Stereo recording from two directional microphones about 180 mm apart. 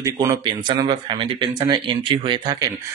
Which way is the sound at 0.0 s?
20° right (ahead or behind).